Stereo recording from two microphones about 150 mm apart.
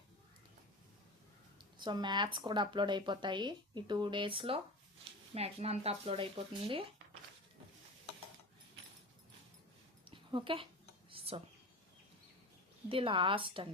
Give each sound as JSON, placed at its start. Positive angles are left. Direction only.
{"t": 1.8, "sound": "speech", "side_deg": -30}
{"t": 10.1, "sound": "a sound", "side_deg": -35}
{"t": 12.9, "sound": "speech", "side_deg": -35}